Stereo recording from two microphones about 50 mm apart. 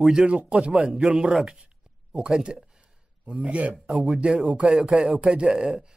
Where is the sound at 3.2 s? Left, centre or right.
Right.